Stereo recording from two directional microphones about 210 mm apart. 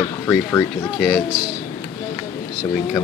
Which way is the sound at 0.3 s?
10° left (ahead or behind).